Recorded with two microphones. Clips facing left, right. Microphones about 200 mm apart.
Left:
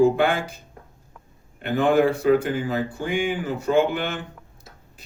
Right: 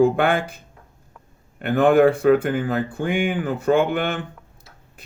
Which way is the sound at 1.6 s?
55° right (ahead or behind).